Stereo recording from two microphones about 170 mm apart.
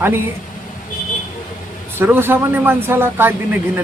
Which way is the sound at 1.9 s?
15° right (ahead or behind).